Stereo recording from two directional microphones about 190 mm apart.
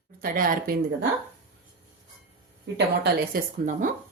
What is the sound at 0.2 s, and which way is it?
Speech, 45° right (ahead or behind).